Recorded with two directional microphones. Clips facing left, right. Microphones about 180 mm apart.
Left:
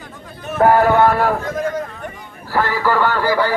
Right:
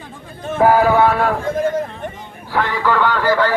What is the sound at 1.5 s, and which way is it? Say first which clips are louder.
Speech: right 3 dB; 30° right (ahead or behind).